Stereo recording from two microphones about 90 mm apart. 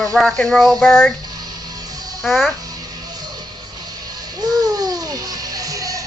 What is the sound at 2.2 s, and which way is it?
Speech, centre (ahead or behind).